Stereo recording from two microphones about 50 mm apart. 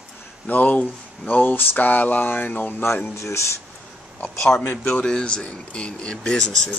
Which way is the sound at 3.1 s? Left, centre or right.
Left.